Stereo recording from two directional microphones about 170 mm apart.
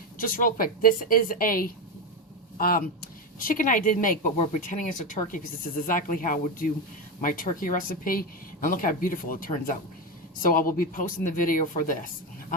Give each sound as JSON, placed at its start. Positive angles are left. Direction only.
{"t": 0.2, "sound": "speech", "side_deg": 55}